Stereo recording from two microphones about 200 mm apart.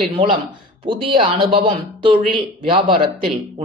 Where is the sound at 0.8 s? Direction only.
25° right (ahead or behind).